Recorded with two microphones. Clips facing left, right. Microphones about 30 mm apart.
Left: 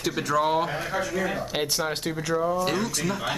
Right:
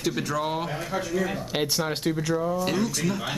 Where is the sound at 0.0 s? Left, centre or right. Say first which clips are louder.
Left 3 dB; centre.